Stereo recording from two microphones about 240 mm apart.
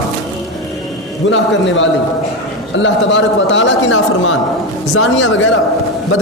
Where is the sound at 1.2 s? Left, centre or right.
Left.